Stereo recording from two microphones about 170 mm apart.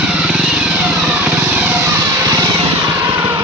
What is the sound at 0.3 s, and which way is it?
Vehicle, 5° right (ahead or behind).